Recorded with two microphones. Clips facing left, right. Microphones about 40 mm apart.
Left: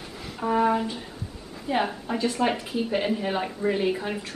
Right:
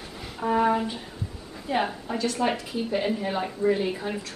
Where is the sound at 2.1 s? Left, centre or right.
Centre.